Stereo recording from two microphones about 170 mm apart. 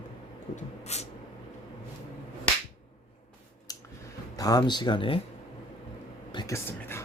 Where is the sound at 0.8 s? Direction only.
40° left (ahead or behind).